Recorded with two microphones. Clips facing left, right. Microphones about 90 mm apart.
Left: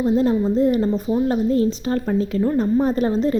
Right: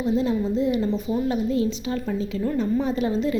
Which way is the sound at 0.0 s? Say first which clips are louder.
Left 5 dB; 40° left (ahead or behind).